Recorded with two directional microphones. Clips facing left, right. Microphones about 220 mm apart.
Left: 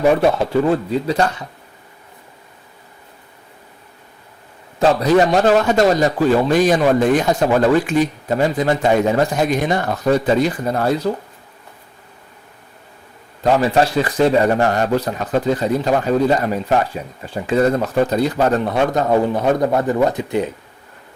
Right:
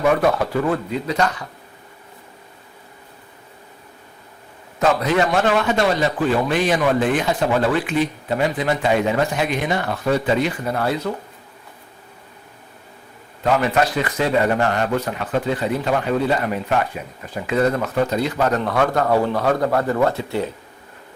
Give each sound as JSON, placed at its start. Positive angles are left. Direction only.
{"t": 0.0, "sound": "speech", "side_deg": 30}
{"t": 4.8, "sound": "a man's voice", "side_deg": 35}
{"t": 13.4, "sound": "a man's voice", "side_deg": 30}